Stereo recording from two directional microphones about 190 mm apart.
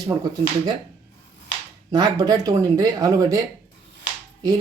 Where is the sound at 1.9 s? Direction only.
20° right (ahead or behind).